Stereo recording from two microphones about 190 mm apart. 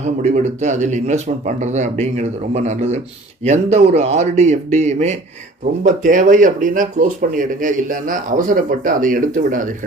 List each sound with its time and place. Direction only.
0.0 s speech: 40° right (ahead or behind)